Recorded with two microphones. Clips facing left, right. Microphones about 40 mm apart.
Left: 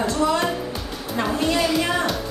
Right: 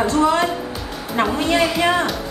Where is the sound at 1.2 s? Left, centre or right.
Right.